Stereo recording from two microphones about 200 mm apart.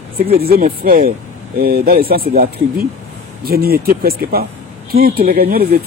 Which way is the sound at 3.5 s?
50° right (ahead or behind).